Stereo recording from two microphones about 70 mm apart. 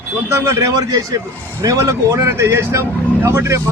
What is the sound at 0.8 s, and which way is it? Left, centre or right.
Speech, right.